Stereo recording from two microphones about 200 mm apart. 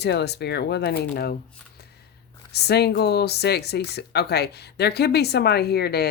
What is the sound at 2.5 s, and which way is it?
Speech, 55° left (ahead or behind).